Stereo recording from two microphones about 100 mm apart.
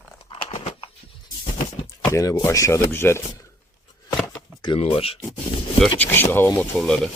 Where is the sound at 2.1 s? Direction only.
30° left (ahead or behind).